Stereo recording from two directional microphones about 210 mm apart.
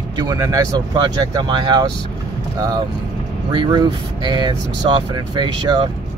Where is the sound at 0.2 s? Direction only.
15° right (ahead or behind).